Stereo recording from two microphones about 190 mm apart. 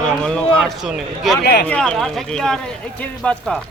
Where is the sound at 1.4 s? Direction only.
55° left (ahead or behind).